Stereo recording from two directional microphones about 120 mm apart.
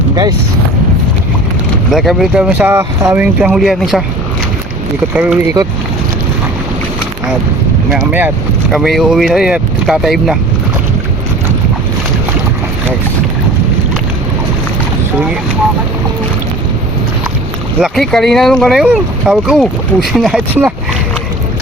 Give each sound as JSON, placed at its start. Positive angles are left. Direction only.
{"t": 1.9, "sound": "speech", "side_deg": -5}
{"t": 2.7, "sound": "speech", "side_deg": -25}
{"t": 3.2, "sound": "speech", "side_deg": -5}
{"t": 5.1, "sound": "speech", "side_deg": -10}
{"t": 7.9, "sound": "speech", "side_deg": -10}
{"t": 17.7, "sound": "speech", "side_deg": 0}